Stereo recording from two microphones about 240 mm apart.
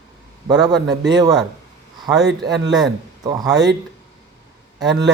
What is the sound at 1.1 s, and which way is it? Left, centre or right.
Speech, centre.